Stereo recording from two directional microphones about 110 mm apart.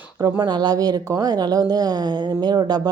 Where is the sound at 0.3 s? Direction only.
40° right (ahead or behind).